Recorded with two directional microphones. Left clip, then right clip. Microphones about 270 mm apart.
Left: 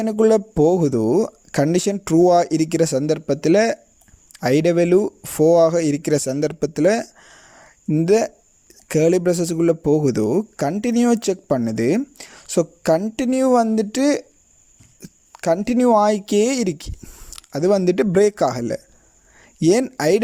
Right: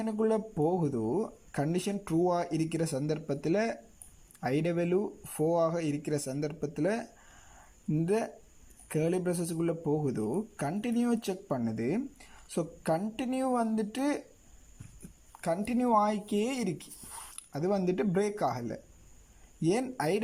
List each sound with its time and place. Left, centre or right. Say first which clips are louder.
0.0 s speech: left 14 dB; left
15.3 s speech: left 13 dB; left